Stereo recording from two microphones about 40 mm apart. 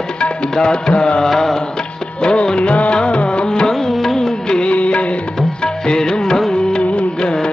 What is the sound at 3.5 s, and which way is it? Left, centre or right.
Music, centre.